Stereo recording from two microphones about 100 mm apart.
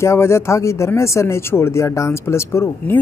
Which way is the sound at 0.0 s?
30° left (ahead or behind).